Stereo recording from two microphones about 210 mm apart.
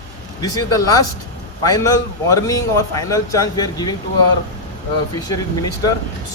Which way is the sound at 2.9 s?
15° left (ahead or behind).